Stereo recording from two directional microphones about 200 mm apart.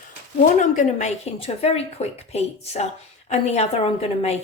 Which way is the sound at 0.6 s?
40° left (ahead or behind).